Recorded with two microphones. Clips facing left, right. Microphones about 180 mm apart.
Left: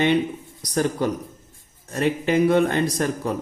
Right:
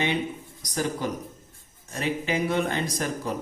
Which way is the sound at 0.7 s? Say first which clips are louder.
Left 6 dB; 60° left (ahead or behind).